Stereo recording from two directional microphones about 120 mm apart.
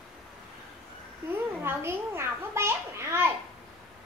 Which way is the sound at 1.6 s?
20° right (ahead or behind).